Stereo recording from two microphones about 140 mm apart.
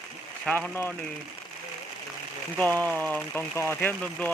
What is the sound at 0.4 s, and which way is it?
Speech, 10° left (ahead or behind).